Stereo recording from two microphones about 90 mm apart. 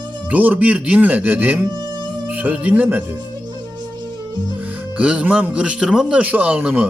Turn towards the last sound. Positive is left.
turn(degrees=-15)  # may be behind; listen again after turning